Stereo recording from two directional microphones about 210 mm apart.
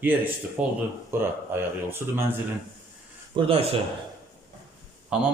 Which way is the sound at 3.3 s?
25° right (ahead or behind).